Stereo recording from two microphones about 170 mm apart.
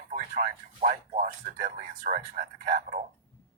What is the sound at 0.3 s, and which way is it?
Speech, 50° right (ahead or behind).